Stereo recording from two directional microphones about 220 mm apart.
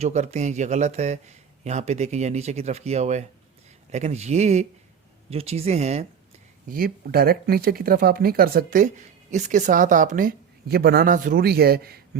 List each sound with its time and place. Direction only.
0.0 s speech: 30° right (ahead or behind)
6.7 s speech: 40° right (ahead or behind)